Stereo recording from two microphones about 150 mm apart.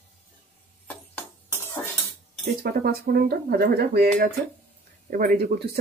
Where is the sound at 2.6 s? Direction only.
90° right.